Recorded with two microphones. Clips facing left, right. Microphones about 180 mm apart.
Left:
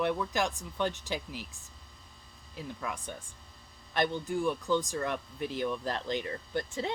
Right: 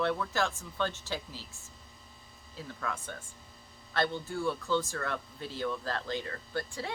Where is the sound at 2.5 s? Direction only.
15° left (ahead or behind).